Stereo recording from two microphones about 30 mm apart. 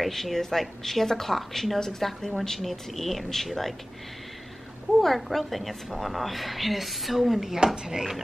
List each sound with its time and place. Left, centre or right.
0.1 s a woman's voice: centre
5.0 s a woman's voice: centre
7.6 s speech: right